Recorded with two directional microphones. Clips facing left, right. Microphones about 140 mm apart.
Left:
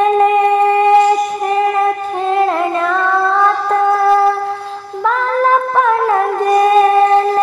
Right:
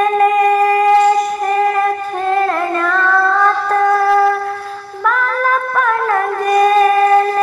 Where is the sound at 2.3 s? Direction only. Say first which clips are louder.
Left 1 dB; 15° left (ahead or behind).